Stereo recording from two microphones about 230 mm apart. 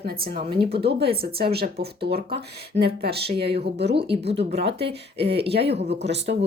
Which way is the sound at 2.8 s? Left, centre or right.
Right.